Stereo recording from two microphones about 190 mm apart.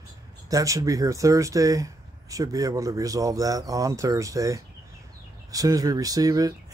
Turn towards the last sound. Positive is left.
turn(degrees=-20)  # may be behind; listen again after turning